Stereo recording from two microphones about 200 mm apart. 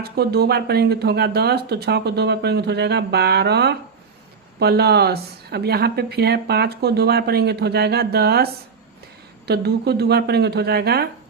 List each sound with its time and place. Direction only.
0.0 s speech: 55° right (ahead or behind)
9.5 s speech: 55° right (ahead or behind)